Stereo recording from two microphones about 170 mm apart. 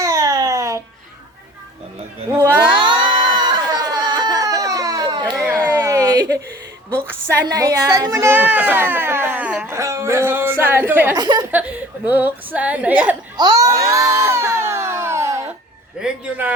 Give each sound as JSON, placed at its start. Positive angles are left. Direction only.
{"t": 0.0, "sound": "babbling", "side_deg": -20}
{"t": 2.6, "sound": "baby cry", "side_deg": -30}
{"t": 5.6, "sound": "a sound", "side_deg": -15}
{"t": 7.0, "sound": "a woman's voice", "side_deg": -15}
{"t": 11.2, "sound": "a woman's voice", "side_deg": -25}
{"t": 12.0, "sound": "a woman's voice", "side_deg": -10}
{"t": 13.3, "sound": "a sound", "side_deg": -25}
{"t": 16.0, "sound": "a man's voice", "side_deg": -5}